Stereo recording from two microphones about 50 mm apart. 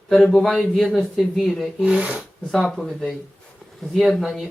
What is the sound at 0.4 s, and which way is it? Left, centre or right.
Speech, centre.